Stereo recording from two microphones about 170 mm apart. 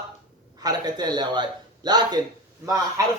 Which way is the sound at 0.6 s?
25° right (ahead or behind).